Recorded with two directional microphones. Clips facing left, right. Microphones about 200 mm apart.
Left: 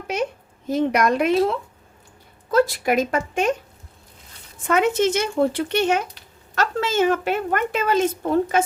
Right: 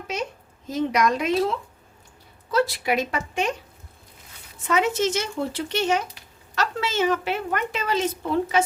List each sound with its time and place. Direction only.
0.7 s a woman's voice: 60° left (ahead or behind)
4.6 s a woman's voice: 55° left (ahead or behind)